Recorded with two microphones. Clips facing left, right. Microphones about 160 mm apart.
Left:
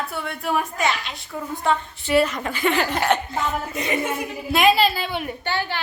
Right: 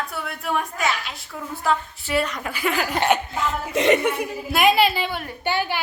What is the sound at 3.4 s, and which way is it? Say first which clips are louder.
Speech: right 5 dB; 90° right.